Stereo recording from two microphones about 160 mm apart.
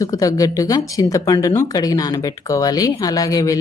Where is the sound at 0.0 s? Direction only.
20° left (ahead or behind).